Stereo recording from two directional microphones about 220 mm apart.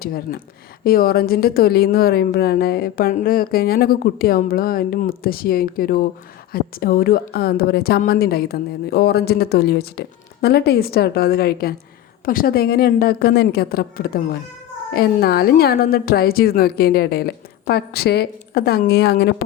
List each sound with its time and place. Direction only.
0.0 s a woman's voice: 45° left (ahead or behind)